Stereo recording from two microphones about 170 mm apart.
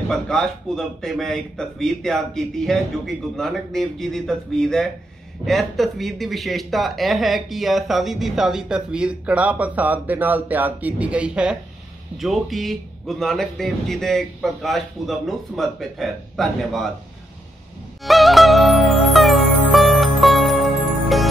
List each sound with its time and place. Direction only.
0.1 s speech: centre (ahead or behind)
18.0 s music: centre (ahead or behind)